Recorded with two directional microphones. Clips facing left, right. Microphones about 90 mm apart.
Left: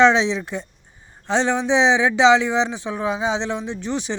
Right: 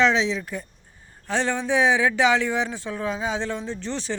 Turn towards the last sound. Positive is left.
turn(degrees=15)  # may be behind; listen again after turning